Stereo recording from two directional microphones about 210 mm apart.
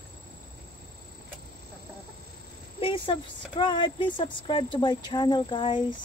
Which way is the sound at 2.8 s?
25° left (ahead or behind).